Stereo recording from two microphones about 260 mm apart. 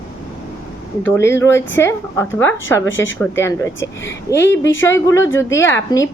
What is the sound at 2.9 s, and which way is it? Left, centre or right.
Speech, left.